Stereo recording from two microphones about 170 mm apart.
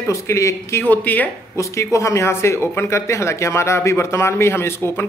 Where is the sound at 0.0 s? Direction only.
15° left (ahead or behind).